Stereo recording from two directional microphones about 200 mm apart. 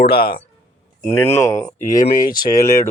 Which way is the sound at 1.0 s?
10° left (ahead or behind).